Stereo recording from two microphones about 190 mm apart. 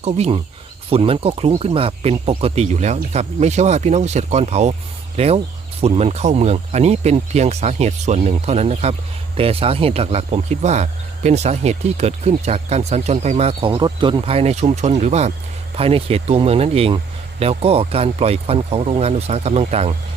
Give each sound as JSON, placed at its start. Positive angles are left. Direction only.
{"t": 0.0, "sound": "speech", "side_deg": -35}